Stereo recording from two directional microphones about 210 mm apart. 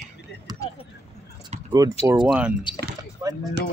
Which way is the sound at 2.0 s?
20° right (ahead or behind).